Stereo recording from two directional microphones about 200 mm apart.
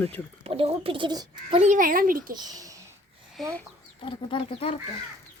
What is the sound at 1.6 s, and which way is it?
Speech, 40° right (ahead or behind).